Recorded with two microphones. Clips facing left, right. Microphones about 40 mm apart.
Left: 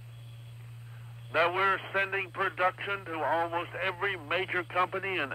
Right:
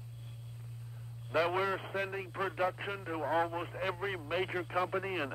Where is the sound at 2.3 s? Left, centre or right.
Left.